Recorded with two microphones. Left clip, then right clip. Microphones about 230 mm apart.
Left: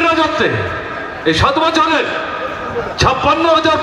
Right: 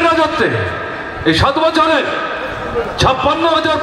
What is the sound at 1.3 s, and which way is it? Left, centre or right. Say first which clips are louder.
Speech: even; left.